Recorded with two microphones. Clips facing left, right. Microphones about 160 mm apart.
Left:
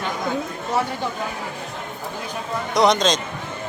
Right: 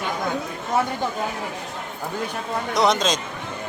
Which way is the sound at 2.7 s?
Centre (ahead or behind).